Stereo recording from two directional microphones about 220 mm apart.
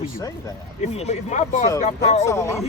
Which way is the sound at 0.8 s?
30° left (ahead or behind).